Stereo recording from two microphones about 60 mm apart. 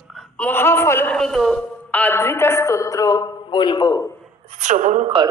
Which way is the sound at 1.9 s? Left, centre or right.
Left.